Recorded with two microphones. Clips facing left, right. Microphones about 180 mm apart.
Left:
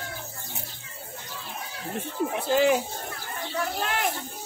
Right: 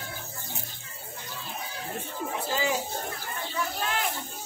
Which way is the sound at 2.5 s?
60° left (ahead or behind).